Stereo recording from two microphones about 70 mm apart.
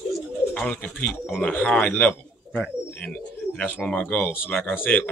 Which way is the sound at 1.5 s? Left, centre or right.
Centre.